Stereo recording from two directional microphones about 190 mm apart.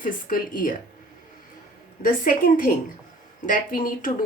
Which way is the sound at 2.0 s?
45° left (ahead or behind).